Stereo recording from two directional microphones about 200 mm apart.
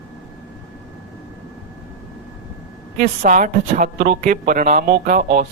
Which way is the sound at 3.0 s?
40° right (ahead or behind).